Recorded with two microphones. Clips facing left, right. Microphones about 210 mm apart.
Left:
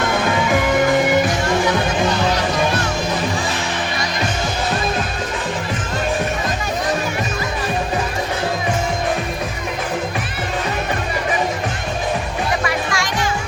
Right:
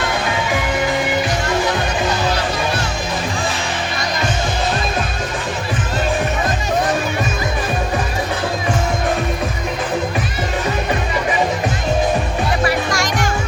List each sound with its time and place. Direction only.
12.6 s music: 45° right (ahead or behind)